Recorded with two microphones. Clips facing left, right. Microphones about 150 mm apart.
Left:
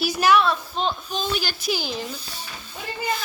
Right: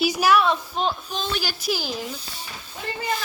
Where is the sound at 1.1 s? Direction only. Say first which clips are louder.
Left 1 dB; centre (ahead or behind).